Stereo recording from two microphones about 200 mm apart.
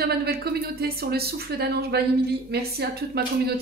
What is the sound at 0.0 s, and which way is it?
Speech, 50° right (ahead or behind).